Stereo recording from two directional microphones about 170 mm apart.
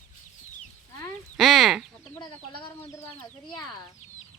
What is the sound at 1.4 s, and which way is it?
Chicken, centre (ahead or behind).